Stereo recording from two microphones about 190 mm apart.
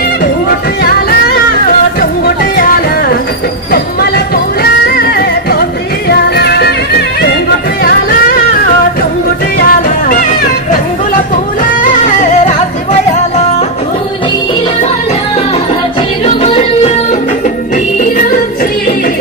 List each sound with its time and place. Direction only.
2.0 s music: 50° left (ahead or behind)
5.5 s music: 55° left (ahead or behind)
9.7 s music: 50° left (ahead or behind)
11.8 s music: 45° left (ahead or behind)
16.3 s music: 30° left (ahead or behind)
18.1 s music: 45° left (ahead or behind)